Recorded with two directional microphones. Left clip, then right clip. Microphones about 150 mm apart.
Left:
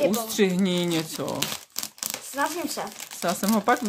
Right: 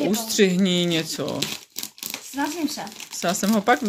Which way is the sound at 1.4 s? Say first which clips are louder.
Right 1 dB; 25° left (ahead or behind).